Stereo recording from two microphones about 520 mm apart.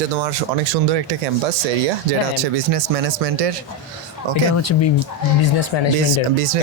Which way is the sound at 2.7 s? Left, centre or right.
Right.